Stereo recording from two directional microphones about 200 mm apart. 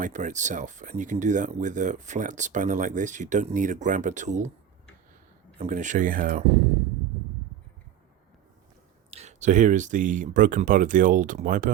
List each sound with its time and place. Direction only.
0.0 s speech: 40° right (ahead or behind)
5.5 s speech: 35° right (ahead or behind)
9.0 s speech: 35° right (ahead or behind)